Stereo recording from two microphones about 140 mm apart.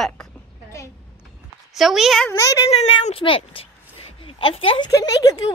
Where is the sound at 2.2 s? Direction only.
20° left (ahead or behind).